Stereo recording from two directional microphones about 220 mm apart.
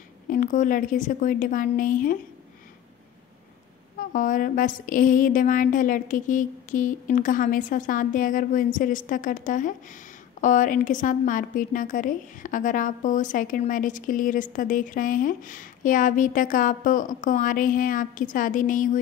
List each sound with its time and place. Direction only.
0.3 s a woman's voice: 35° left (ahead or behind)
4.0 s a woman's voice: 35° left (ahead or behind)